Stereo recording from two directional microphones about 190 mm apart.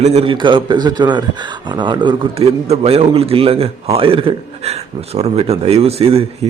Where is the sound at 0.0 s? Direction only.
35° right (ahead or behind).